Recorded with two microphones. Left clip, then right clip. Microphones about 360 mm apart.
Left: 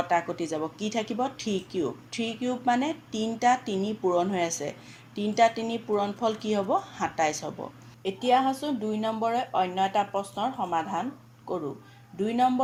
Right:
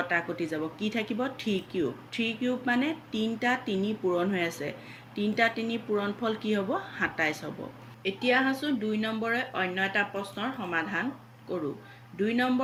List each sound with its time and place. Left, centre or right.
0.1 s speech: centre
12.2 s speech: centre